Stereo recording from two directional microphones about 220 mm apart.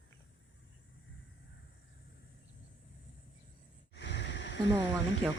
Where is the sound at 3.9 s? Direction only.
55° left (ahead or behind).